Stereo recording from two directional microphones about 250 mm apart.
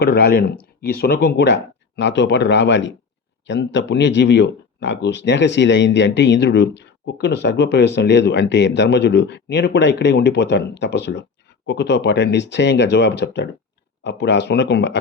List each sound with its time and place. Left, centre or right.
0.0 s speech: left